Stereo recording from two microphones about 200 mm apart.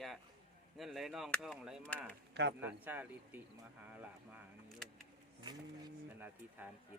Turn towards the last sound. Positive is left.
turn(degrees=-20)  # may be behind; listen again after turning